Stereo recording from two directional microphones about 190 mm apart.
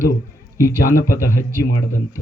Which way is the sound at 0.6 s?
45° left (ahead or behind).